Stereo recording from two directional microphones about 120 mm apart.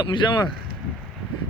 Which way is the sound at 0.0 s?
40° left (ahead or behind).